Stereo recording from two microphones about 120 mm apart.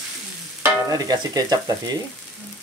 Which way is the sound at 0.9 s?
35° right (ahead or behind).